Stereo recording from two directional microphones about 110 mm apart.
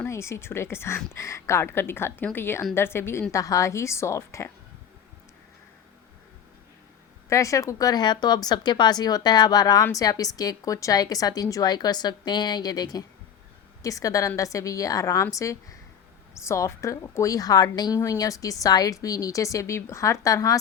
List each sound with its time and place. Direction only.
0.0 s a woman's voice: 25° left (ahead or behind)
7.3 s a woman's voice: 30° left (ahead or behind)